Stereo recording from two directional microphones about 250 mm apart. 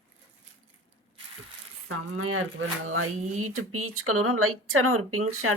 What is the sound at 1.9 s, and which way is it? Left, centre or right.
Speech, right.